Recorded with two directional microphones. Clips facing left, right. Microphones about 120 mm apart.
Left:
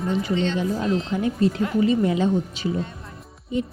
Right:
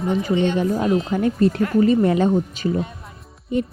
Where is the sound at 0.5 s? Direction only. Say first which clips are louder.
Right 4 dB; 50° right (ahead or behind).